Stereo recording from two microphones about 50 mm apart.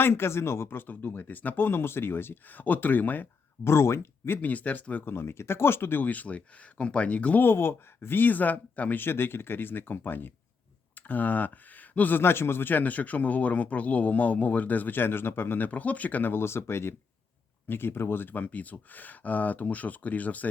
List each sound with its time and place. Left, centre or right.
0.0 s speech: left
3.6 s speech: left
4.4 s speech: left
5.1 s speech: left
7.4 s speech: left
9.0 s speech: left
16.3 s speech: left